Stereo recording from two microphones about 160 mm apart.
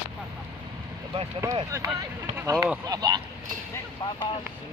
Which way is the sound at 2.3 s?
20° right (ahead or behind).